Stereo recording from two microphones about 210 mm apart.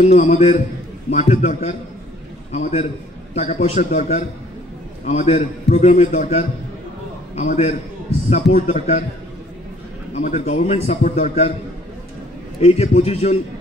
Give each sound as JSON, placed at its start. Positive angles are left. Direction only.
{"t": 0.0, "sound": "a man's voice", "side_deg": 30}
{"t": 10.1, "sound": "a man's voice", "side_deg": 35}
{"t": 12.5, "sound": "a man's voice", "side_deg": 30}